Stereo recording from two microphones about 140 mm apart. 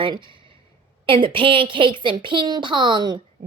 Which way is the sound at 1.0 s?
35° right (ahead or behind).